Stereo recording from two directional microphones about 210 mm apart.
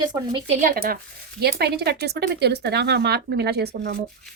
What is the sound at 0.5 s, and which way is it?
Speech, 40° right (ahead or behind).